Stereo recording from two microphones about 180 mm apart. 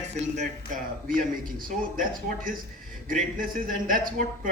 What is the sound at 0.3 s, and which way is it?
A man's voice, 50° right (ahead or behind).